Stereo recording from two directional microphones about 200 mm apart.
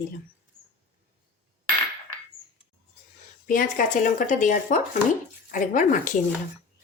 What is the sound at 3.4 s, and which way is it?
Speech, 40° left (ahead or behind).